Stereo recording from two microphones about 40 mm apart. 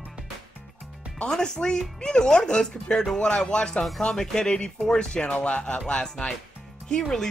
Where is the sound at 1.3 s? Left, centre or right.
Centre.